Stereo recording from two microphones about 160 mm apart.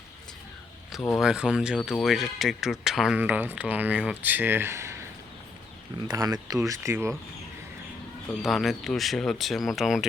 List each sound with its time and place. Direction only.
1.1 s speech: 5° right (ahead or behind)
6.1 s speech: 25° right (ahead or behind)
8.3 s speech: centre (ahead or behind)